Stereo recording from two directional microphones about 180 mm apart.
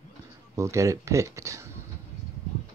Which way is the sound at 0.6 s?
15° right (ahead or behind).